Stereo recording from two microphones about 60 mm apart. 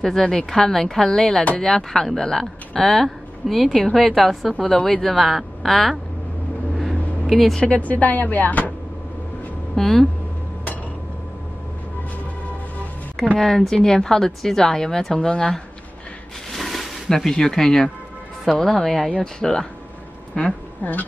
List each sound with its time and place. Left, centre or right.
0.0 s a woman's voice: centre
6.7 s vehicle: centre
7.6 s speech: left
9.8 s a woman's voice: centre
13.4 s a woman's voice: centre
16.5 s music: centre
18.4 s a woman's voice: centre
20.3 s speech: centre